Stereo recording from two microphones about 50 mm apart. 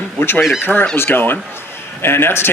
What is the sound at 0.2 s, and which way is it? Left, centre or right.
Speech, left.